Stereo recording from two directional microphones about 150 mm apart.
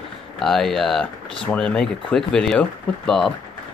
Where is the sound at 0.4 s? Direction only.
Centre (ahead or behind).